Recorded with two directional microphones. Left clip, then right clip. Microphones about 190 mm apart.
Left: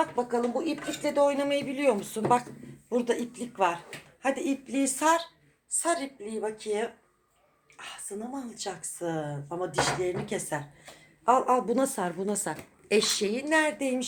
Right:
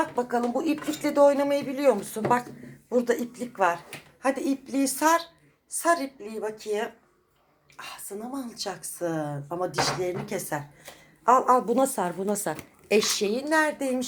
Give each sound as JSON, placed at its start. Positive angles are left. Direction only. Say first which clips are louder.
{"t": 0.2, "sound": "a woman's voice", "louder": "right 2 dB", "side_deg": -10}